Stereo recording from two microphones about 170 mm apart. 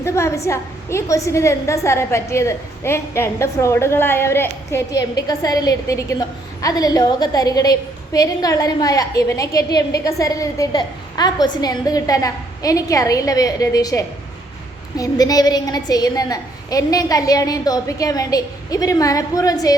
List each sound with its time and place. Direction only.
0.0 s a woman's voice: 15° left (ahead or behind)